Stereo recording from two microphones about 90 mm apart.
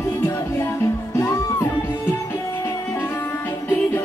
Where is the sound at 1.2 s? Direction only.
35° left (ahead or behind).